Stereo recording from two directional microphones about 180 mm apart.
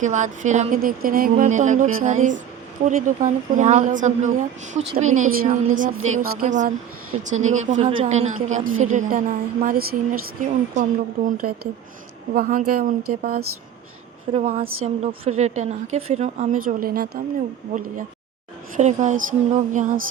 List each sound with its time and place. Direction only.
0.0 s a woman's voice: 45° right (ahead or behind)
14.3 s a woman's voice: 35° right (ahead or behind); by 17.2 s 55° right (ahead or behind)
18.8 s speech: 40° right (ahead or behind)